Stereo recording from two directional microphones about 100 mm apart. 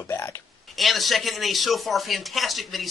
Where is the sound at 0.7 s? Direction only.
Centre (ahead or behind).